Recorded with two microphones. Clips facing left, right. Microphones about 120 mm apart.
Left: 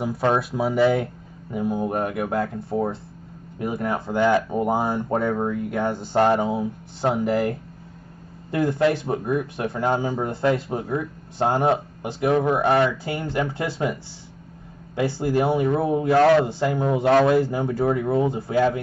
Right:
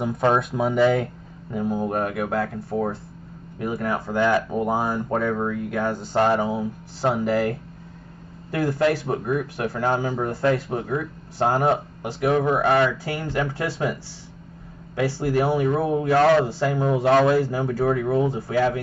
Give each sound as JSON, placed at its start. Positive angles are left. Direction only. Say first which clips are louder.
{"t": 0.3, "sound": "speech", "louder": "even", "side_deg": 5}
{"t": 8.5, "sound": "speech", "louder": "left 1 dB", "side_deg": 20}
{"t": 15.0, "sound": "speech", "louder": "even", "side_deg": 25}